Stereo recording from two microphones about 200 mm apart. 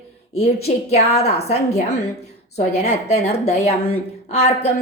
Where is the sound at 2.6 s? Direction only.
35° left (ahead or behind).